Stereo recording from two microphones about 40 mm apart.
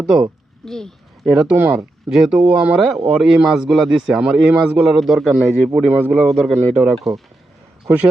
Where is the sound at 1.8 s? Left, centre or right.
Centre.